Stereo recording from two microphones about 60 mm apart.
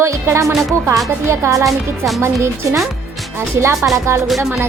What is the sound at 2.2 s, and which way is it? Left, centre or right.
Speech, right.